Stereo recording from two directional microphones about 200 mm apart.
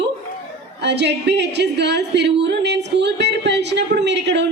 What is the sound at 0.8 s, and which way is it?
Speech, 60° right (ahead or behind).